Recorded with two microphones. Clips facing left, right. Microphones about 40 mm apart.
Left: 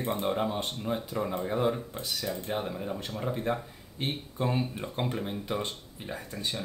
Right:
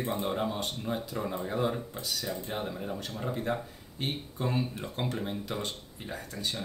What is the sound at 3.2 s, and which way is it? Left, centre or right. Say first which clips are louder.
Speech: left 1 dB; centre.